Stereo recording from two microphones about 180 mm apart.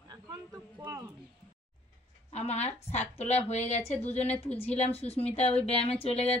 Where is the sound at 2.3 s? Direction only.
35° left (ahead or behind).